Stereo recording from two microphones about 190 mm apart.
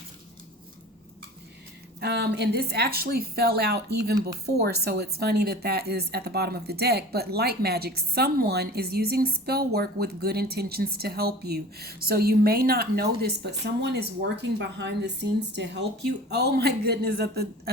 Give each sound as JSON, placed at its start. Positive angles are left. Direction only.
{"t": 2.0, "sound": "a woman's voice", "side_deg": -60}